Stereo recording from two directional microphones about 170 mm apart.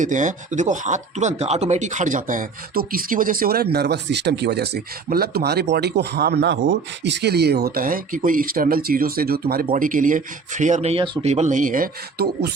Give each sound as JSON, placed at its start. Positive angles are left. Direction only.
{"t": 0.0, "sound": "speech", "side_deg": -50}
{"t": 5.0, "sound": "speech", "side_deg": -60}
{"t": 9.7, "sound": "speech", "side_deg": -50}
{"t": 11.3, "sound": "speech", "side_deg": -45}